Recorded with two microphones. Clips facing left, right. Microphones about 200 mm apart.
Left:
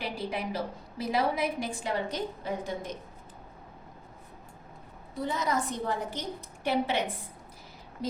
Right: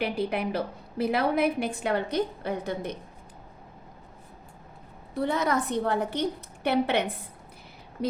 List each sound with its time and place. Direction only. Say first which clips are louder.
0.0 s a woman's voice: right 6 dB; 60° right (ahead or behind)
5.1 s a woman's voice: right 4 dB; 65° right (ahead or behind)